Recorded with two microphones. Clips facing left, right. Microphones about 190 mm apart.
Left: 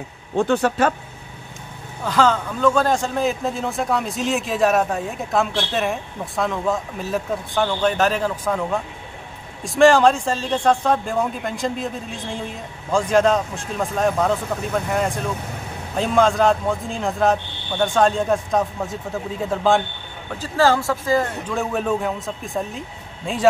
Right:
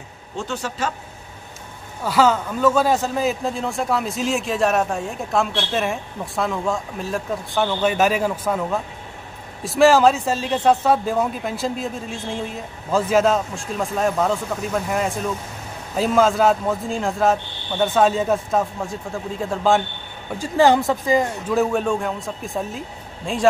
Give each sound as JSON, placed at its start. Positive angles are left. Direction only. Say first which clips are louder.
{"t": 0.4, "sound": "speech", "louder": "left 8 dB", "side_deg": 55}
{"t": 2.0, "sound": "a man's voice", "louder": "right 1 dB", "side_deg": -5}
{"t": 20.2, "sound": "speech", "louder": "right 2 dB", "side_deg": -10}
{"t": 21.5, "sound": "a man's voice", "louder": "right 3 dB", "side_deg": 0}